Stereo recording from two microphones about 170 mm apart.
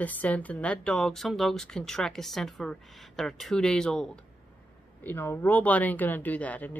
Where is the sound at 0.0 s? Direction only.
10° left (ahead or behind).